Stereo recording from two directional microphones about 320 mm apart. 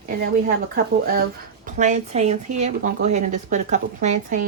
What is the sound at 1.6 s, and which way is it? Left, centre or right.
A woman's voice, right.